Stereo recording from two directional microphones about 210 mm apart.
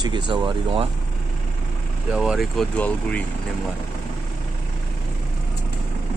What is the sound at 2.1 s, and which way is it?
Speech, centre (ahead or behind).